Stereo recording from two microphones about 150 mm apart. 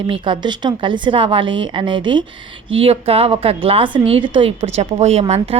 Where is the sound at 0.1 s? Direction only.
30° right (ahead or behind).